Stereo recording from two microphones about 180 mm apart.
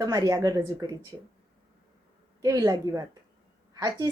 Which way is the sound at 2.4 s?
20° right (ahead or behind).